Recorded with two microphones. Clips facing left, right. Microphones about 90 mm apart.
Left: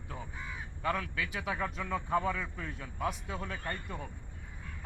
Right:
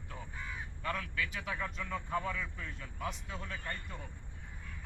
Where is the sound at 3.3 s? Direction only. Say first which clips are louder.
Left 4 dB; 55° left (ahead or behind).